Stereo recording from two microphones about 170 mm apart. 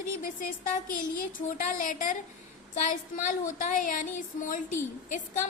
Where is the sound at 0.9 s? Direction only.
55° left (ahead or behind).